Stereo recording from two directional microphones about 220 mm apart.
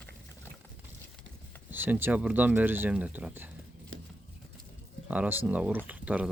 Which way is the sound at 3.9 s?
65° right (ahead or behind).